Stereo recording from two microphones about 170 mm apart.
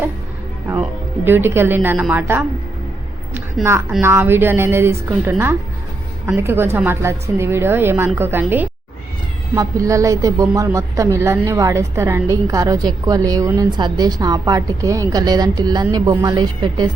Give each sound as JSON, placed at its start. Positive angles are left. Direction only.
{"t": 0.7, "sound": "a woman's voice", "side_deg": -10}